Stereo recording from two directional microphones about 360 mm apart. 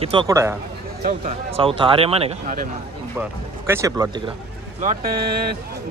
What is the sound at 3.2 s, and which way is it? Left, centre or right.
Speech, centre.